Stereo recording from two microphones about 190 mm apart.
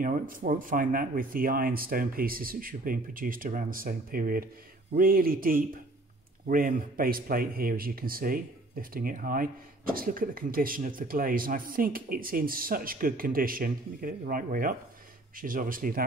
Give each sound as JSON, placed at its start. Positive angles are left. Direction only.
{"t": 0.0, "sound": "speech", "side_deg": -45}